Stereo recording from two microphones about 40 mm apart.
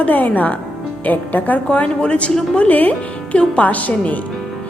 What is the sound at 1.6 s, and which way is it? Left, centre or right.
Speech, left.